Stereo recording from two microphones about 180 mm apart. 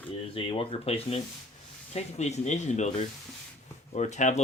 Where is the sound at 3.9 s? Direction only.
40° left (ahead or behind).